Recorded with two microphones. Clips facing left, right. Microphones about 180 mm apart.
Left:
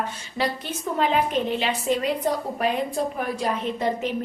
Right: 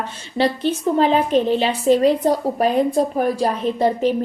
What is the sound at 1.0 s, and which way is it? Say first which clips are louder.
A woman's voice: right 5 dB; 35° right (ahead or behind).